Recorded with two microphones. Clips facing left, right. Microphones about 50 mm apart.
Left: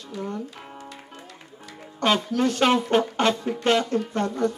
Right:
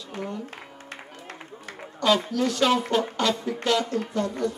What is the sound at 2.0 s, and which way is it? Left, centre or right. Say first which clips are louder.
Speech: even; left.